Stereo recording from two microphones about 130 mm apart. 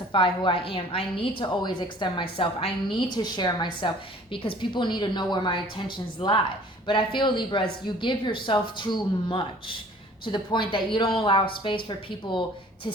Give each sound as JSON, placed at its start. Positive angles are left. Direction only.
{"t": 0.1, "sound": "a woman's voice", "side_deg": 40}